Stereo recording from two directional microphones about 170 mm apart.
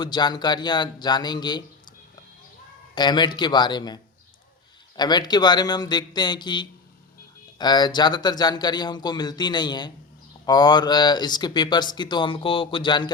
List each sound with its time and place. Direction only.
0.0 s speech: 25° left (ahead or behind)
2.9 s speech: 25° left (ahead or behind)